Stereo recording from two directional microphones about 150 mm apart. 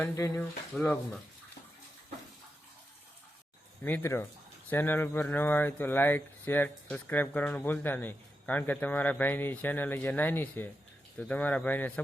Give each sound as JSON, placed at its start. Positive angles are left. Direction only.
{"t": 0.0, "sound": "speech", "side_deg": 20}
{"t": 0.7, "sound": "speech", "side_deg": 0}
{"t": 3.8, "sound": "speech", "side_deg": 15}